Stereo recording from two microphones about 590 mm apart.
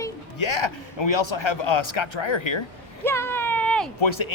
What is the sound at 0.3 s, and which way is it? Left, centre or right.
Speech, left.